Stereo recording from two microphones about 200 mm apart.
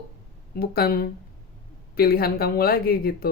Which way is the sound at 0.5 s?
50° left (ahead or behind).